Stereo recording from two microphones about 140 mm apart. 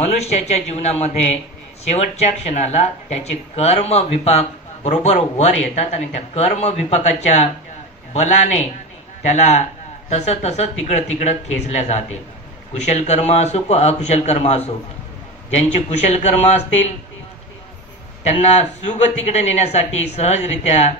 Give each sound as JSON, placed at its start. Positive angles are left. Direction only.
{"t": 0.2, "sound": "a man's voice", "side_deg": 50}
{"t": 15.7, "sound": "speech", "side_deg": 55}
{"t": 18.2, "sound": "speech", "side_deg": 50}